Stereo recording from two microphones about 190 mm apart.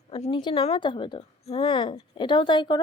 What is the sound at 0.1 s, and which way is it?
Speech, 30° left (ahead or behind).